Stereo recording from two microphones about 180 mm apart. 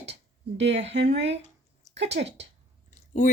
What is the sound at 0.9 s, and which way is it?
Speech, 75° right (ahead or behind).